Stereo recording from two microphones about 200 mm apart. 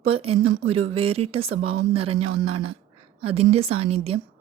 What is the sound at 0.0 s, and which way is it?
A woman's voice, 30° right (ahead or behind).